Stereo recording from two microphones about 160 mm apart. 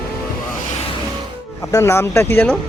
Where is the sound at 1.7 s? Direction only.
20° left (ahead or behind).